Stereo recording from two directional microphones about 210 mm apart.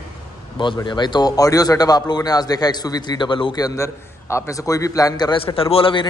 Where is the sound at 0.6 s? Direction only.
20° left (ahead or behind).